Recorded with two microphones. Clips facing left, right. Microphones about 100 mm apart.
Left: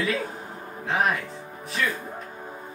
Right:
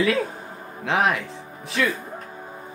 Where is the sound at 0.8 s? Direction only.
90° right.